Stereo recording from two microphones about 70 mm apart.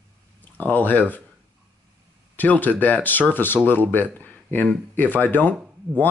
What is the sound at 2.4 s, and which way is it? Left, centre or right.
Speech, left.